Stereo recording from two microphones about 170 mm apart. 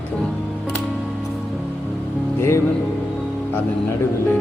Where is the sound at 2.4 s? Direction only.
15° left (ahead or behind).